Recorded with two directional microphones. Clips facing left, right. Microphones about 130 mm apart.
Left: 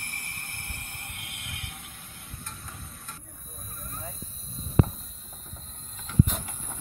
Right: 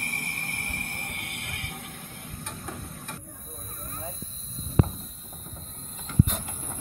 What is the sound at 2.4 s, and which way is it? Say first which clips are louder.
Tick-tock: right 7 dB; 75° right (ahead or behind).